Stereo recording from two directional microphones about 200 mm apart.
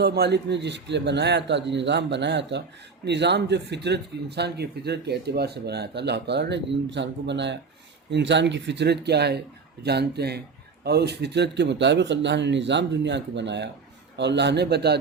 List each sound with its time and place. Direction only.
0.0 s speech: 55° right (ahead or behind)